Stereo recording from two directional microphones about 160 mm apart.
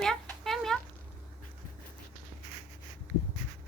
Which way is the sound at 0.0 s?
5° left (ahead or behind).